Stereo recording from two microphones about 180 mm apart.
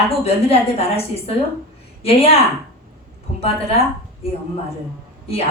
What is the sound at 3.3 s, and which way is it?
Speech, 30° left (ahead or behind).